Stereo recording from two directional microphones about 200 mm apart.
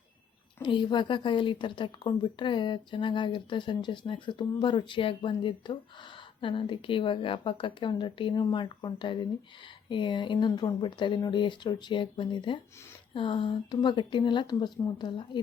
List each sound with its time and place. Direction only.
0.6 s a woman's voice: 25° left (ahead or behind)